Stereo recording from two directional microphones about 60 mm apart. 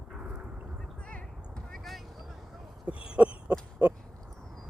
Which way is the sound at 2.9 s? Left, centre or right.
Centre.